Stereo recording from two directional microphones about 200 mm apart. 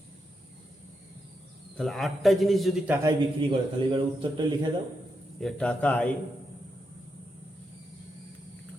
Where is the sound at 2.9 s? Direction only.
15° right (ahead or behind).